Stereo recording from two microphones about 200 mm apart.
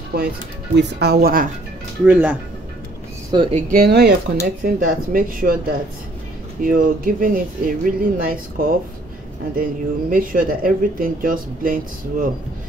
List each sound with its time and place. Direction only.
0.1 s speech: 55° right (ahead or behind)
2.0 s speech: 10° right (ahead or behind)
3.3 s speech: 25° right (ahead or behind)
3.7 s speech: 50° right (ahead or behind)